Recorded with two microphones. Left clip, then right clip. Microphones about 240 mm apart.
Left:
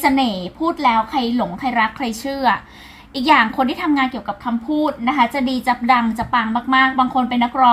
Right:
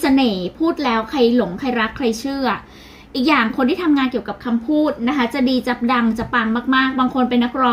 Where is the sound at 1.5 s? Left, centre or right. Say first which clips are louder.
Left 2 dB; left.